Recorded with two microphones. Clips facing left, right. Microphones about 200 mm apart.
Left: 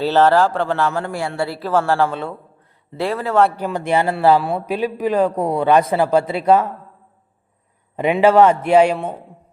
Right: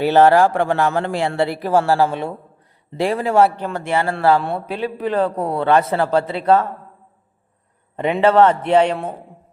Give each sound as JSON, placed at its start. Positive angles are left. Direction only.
{"t": 0.0, "sound": "a man's voice", "side_deg": -15}
{"t": 3.5, "sound": "a man's voice", "side_deg": 15}
{"t": 4.4, "sound": "a man's voice", "side_deg": 5}
{"t": 7.9, "sound": "a man's voice", "side_deg": 10}